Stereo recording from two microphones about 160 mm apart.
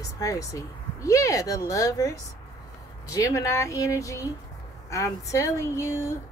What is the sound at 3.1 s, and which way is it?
A woman's voice, 20° left (ahead or behind).